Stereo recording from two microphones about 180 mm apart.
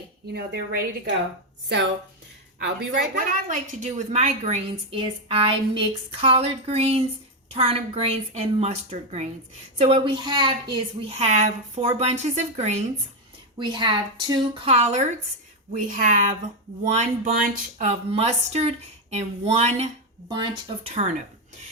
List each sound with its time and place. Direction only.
0.3 s a woman's voice: 65° right (ahead or behind)
2.6 s a woman's voice: 70° right (ahead or behind)
3.3 s a woman's voice: 45° right (ahead or behind); by 10.8 s 25° right (ahead or behind)
11.1 s a woman's voice: 40° right (ahead or behind)
13.6 s speech: 25° right (ahead or behind)
15.7 s a woman's voice: 45° right (ahead or behind)
20.2 s speech: 25° right (ahead or behind)